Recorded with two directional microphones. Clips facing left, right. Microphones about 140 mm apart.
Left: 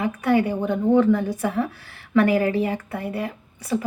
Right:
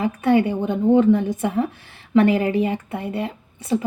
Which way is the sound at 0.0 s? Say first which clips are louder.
Right 2 dB; 30° right (ahead or behind).